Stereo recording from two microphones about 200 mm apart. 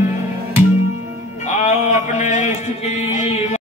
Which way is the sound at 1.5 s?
35° left (ahead or behind).